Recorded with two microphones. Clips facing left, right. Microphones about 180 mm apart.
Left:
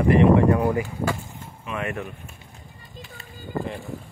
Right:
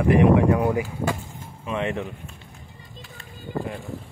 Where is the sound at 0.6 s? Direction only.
10° right (ahead or behind).